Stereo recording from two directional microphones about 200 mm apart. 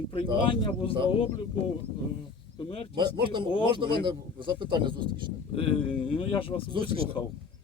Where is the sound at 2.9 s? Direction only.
25° right (ahead or behind).